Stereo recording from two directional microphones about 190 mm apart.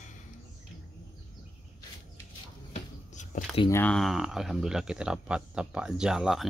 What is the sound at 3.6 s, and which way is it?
Speech, 15° left (ahead or behind).